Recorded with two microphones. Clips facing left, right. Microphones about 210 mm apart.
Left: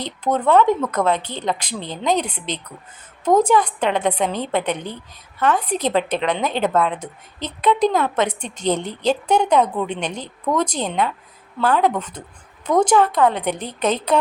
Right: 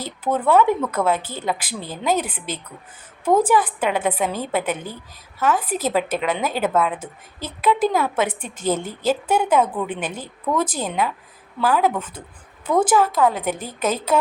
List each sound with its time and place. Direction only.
0.0 s speech: 10° right (ahead or behind)